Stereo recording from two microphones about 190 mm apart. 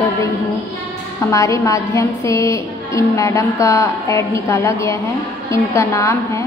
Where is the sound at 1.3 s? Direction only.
15° left (ahead or behind).